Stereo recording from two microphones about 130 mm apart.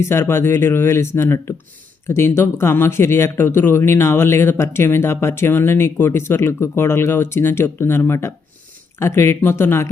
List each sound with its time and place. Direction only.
0.0 s speech: 20° left (ahead or behind)